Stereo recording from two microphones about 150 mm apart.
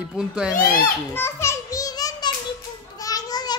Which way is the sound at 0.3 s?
5° right (ahead or behind).